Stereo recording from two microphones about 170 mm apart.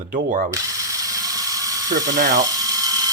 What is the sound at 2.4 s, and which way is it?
Electric toothbrush, 20° right (ahead or behind).